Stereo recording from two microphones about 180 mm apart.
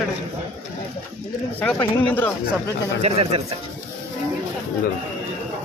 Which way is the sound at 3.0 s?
35° right (ahead or behind).